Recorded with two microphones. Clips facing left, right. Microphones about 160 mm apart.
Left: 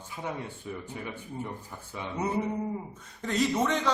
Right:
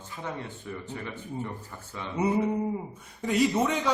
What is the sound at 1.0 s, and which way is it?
Speech, 10° left (ahead or behind).